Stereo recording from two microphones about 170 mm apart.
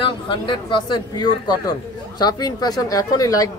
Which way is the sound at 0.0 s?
30° left (ahead or behind).